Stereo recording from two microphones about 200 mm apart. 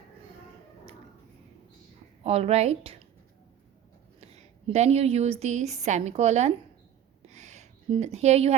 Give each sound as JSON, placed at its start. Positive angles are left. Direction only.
{"t": 2.2, "sound": "a woman's voice", "side_deg": -30}
{"t": 4.2, "sound": "a woman's voice", "side_deg": -35}
{"t": 7.3, "sound": "a sound", "side_deg": -35}